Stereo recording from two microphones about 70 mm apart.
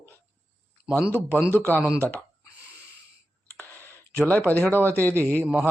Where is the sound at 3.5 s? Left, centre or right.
Right.